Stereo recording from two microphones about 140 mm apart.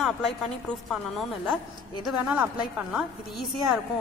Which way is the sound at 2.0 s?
10° right (ahead or behind).